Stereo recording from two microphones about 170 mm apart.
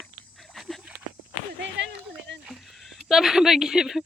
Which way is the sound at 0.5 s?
Centre (ahead or behind).